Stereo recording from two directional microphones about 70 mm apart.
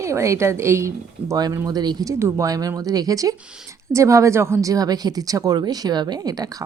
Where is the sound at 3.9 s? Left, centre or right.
Right.